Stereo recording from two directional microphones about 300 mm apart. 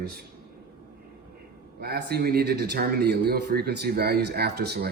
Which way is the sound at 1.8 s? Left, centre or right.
Right.